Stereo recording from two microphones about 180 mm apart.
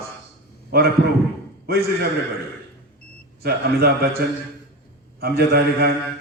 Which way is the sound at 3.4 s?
60° right (ahead or behind).